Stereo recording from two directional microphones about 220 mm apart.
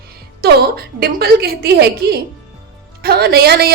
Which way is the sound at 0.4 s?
45° right (ahead or behind).